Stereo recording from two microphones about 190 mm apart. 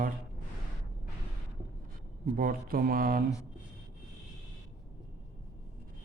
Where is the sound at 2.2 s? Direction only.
50° right (ahead or behind).